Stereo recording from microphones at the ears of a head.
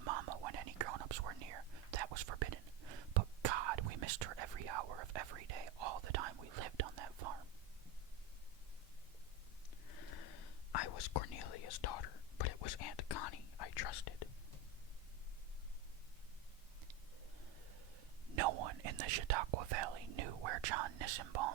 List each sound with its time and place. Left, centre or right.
0.0 s whispering: right
9.8 s whispering: left
18.3 s whispering: right